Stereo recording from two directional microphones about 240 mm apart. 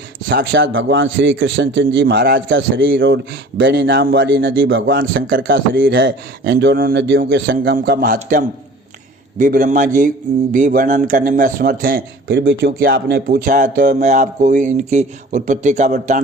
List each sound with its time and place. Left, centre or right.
0.3 s a man's voice: right